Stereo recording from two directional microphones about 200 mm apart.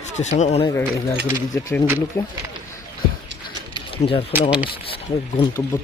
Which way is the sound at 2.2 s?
15° left (ahead or behind).